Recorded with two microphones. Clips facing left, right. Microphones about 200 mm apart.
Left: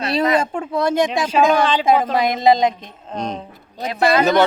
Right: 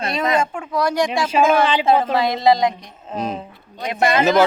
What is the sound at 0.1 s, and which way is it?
Speech, 35° left (ahead or behind).